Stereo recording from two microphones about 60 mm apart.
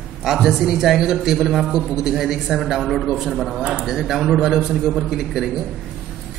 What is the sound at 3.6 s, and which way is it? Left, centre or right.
Speech, centre.